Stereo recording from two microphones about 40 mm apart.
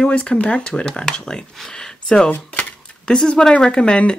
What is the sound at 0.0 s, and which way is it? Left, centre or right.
Speech, left.